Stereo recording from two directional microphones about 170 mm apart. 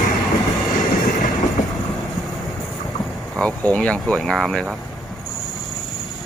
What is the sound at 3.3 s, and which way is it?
Speech, 5° left (ahead or behind).